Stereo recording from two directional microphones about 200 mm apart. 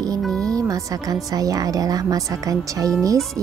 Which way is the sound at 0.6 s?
15° right (ahead or behind).